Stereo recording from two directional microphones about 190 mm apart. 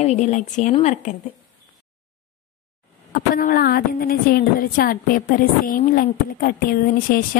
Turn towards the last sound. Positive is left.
turn(degrees=50)  # may be behind; listen again after turning